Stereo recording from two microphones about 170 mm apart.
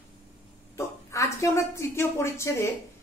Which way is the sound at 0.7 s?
20° left (ahead or behind).